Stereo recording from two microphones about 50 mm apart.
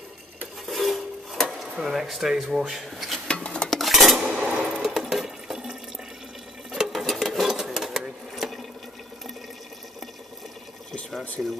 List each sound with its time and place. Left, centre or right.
0.7 s cutlery: centre
1.8 s speech: centre
3.3 s stir: centre
3.7 s dishes: centre
4.5 s a sound: right
4.8 s water: centre
6.9 s sewing machine: centre
11.4 s speech: centre